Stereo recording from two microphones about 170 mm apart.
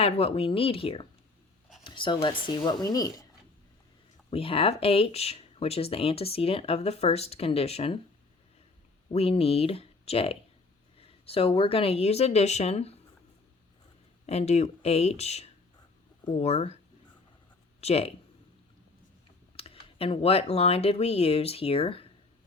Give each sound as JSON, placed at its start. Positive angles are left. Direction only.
{"t": 0.0, "sound": "speech", "side_deg": 35}
{"t": 4.3, "sound": "speech", "side_deg": 35}
{"t": 9.1, "sound": "speech", "side_deg": 35}
{"t": 14.3, "sound": "speech", "side_deg": 40}
{"t": 17.7, "sound": "speech", "side_deg": 35}
{"t": 19.5, "sound": "speech", "side_deg": 35}